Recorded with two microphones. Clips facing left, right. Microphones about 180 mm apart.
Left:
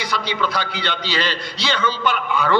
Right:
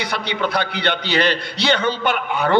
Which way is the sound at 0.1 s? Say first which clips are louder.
Left 1 dB; 60° right (ahead or behind).